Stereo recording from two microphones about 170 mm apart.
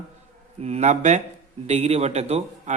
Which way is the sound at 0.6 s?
40° right (ahead or behind).